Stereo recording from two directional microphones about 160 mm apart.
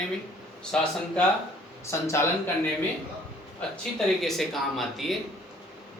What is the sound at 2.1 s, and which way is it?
Speech, 15° left (ahead or behind).